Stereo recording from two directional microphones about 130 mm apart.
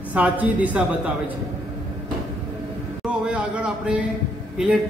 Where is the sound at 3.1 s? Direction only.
10° right (ahead or behind).